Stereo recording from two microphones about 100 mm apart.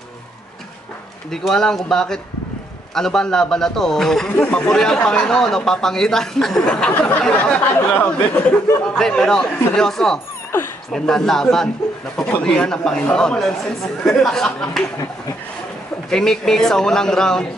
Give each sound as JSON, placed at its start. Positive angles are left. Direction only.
{"t": 1.3, "sound": "a man's voice", "side_deg": 5}
{"t": 16.1, "sound": "a man's voice", "side_deg": 5}